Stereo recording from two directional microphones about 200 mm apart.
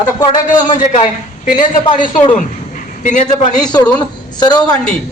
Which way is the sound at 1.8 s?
25° left (ahead or behind).